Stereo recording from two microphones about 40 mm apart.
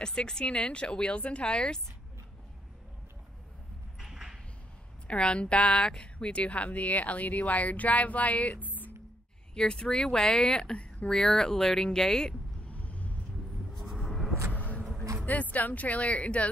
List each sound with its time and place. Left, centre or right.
0.0 s speech: left
4.0 s a sound: centre
5.0 s a woman's voice: left
9.6 s speech: centre
12.7 s vehicle: left
13.8 s vehicle: centre
14.5 s a sound: left
15.2 s a woman's voice: left